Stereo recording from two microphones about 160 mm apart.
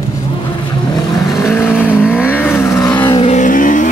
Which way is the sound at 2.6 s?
20° left (ahead or behind).